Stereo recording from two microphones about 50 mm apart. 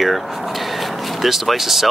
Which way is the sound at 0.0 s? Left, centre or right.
Centre.